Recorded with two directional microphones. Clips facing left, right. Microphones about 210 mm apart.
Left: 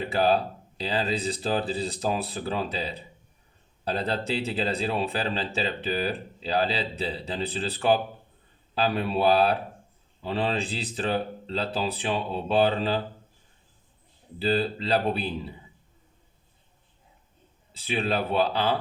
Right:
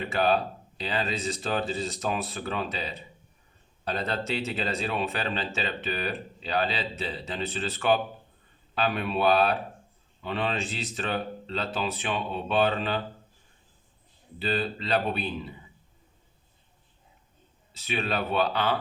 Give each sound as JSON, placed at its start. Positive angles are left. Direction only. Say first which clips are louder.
{"t": 0.1, "sound": "a man's voice", "louder": "left 2 dB", "side_deg": 35}
{"t": 14.3, "sound": "a man's voice", "louder": "left 4 dB", "side_deg": 30}
{"t": 17.7, "sound": "speech", "louder": "left 3 dB", "side_deg": 30}